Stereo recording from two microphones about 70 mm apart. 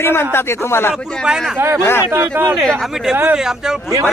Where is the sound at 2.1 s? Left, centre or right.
Right.